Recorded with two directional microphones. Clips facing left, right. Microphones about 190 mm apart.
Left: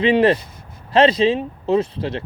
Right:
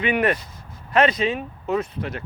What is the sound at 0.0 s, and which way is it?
A man's voice, 30° left (ahead or behind).